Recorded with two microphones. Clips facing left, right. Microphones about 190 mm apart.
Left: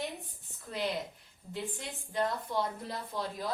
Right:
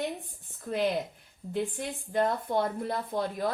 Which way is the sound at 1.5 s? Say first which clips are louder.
Right 7 dB; 55° right (ahead or behind).